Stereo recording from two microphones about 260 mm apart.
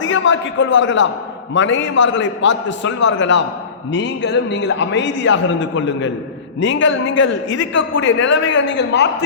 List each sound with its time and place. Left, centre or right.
0.0 s a man's voice: left